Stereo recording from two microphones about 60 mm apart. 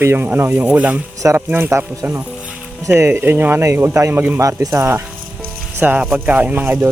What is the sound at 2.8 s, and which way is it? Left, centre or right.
Speech, right.